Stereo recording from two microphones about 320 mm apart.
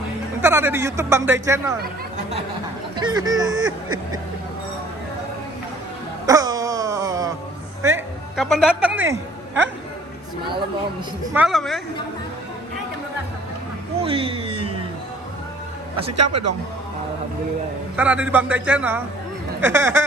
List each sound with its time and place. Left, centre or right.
0.4 s speech: centre
1.8 s chatter: right
2.9 s speech: centre
6.2 s wail: centre
7.8 s a sound: centre
11.3 s a man's voice: centre
14.0 s speech: centre
16.1 s speech: right
17.9 s a man's voice: centre